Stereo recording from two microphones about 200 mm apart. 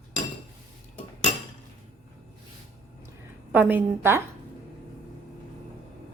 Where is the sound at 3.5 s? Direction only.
10° right (ahead or behind).